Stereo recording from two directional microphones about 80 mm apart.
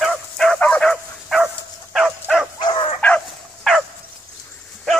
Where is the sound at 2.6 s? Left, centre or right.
Left.